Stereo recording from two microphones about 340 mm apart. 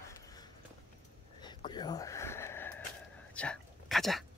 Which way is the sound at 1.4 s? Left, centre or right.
Centre.